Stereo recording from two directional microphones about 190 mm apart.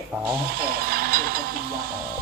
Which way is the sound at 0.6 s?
50° right (ahead or behind).